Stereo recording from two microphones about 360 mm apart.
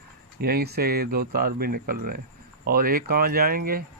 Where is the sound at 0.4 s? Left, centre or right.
Right.